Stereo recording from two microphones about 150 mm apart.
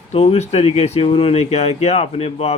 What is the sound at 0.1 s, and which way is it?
Speech, 40° left (ahead or behind).